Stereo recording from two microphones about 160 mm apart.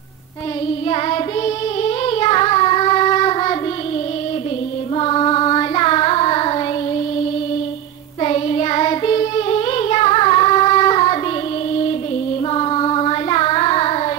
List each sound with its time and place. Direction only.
0.8 s child singing: 30° left (ahead or behind)
4.9 s child singing: 30° left (ahead or behind)
8.2 s child singing: 30° left (ahead or behind)
12.5 s singing: 30° left (ahead or behind)